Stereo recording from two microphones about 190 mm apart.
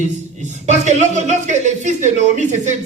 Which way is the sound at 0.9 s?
40° right (ahead or behind).